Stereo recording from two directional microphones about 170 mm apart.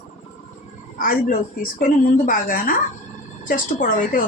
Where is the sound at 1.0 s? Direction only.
55° left (ahead or behind).